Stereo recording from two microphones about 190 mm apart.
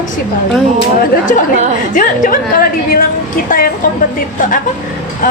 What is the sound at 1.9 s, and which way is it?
A woman's voice, 45° left (ahead or behind).